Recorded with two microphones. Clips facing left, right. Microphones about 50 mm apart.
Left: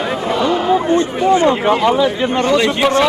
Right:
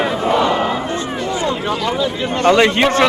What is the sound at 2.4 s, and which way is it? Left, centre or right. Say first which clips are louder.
Speech: right 4 dB; right.